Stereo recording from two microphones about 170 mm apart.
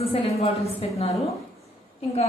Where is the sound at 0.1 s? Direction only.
35° left (ahead or behind).